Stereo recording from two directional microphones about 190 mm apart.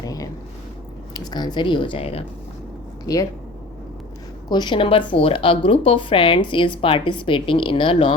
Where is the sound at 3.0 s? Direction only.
20° left (ahead or behind).